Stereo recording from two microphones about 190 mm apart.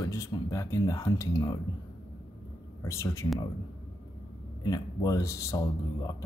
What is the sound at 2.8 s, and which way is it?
Speech, 15° left (ahead or behind).